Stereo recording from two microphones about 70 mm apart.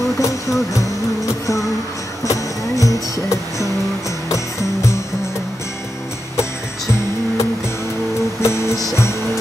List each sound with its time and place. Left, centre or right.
0.2 s music: left
2.2 s music: left
8.4 s music: left